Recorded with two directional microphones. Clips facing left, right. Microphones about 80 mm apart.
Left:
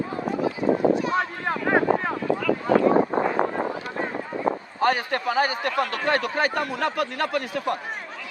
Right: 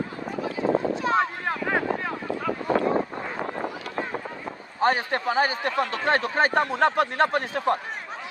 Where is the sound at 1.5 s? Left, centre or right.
Centre.